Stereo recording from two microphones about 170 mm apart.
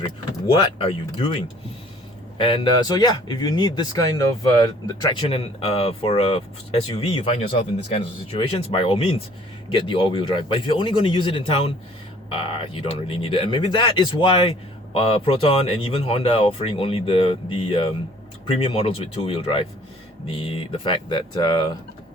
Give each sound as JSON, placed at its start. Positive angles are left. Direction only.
{"t": 0.8, "sound": "a man's voice", "side_deg": 35}